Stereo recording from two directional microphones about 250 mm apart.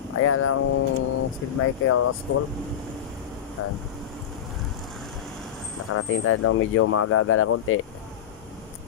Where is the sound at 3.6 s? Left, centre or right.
Left.